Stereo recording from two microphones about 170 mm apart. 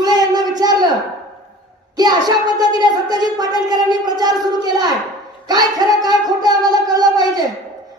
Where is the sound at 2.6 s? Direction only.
25° right (ahead or behind).